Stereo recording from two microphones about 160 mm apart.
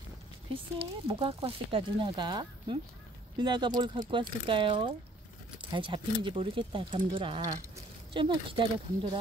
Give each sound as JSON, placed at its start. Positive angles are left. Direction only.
{"t": 0.7, "sound": "speech", "side_deg": -35}